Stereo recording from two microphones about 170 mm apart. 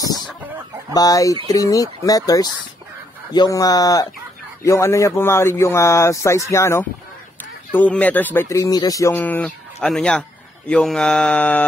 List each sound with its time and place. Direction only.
0.9 s speech: 20° left (ahead or behind); by 10.2 s 5° left (ahead or behind)
10.7 s mantra: 5° left (ahead or behind)